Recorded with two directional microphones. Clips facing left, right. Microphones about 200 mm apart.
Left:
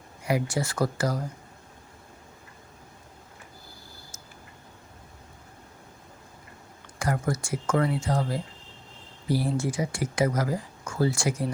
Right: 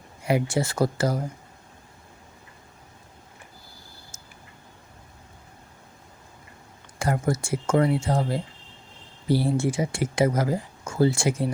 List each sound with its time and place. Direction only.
0.3 s speech: 25° right (ahead or behind)
7.0 s speech: 25° right (ahead or behind)